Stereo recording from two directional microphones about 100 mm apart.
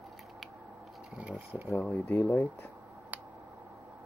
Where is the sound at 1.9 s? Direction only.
20° left (ahead or behind).